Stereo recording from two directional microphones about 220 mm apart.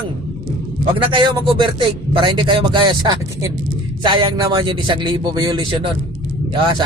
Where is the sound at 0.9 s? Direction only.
20° right (ahead or behind).